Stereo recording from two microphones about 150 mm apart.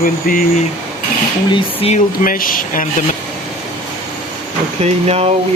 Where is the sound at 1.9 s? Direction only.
65° left (ahead or behind).